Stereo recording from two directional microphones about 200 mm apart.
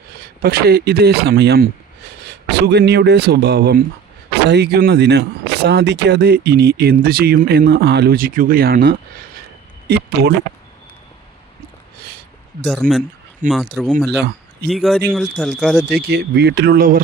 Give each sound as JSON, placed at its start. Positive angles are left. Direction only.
{"t": 0.4, "sound": "speech", "side_deg": -50}
{"t": 12.6, "sound": "speech", "side_deg": 0}
{"t": 13.4, "sound": "speech", "side_deg": -40}
{"t": 13.8, "sound": "speech", "side_deg": -5}
{"t": 14.2, "sound": "a sound", "side_deg": -55}
{"t": 14.7, "sound": "speech", "side_deg": 0}
{"t": 16.0, "sound": "speech", "side_deg": -55}